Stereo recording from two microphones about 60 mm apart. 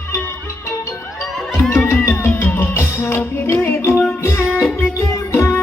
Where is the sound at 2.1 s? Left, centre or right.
Left.